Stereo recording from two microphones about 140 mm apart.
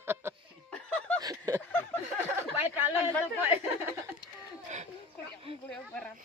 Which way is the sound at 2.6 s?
15° right (ahead or behind).